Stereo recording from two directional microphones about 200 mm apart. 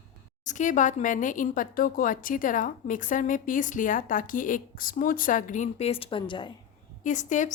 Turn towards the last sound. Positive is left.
turn(degrees=40)  # may be behind; listen again after turning